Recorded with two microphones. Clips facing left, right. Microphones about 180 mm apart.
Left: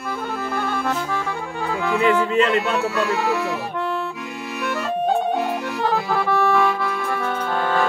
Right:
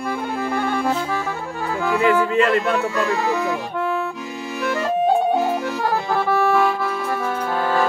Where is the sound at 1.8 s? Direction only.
Centre (ahead or behind).